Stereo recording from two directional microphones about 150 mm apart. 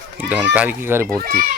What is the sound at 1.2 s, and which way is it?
Speech, 70° right (ahead or behind).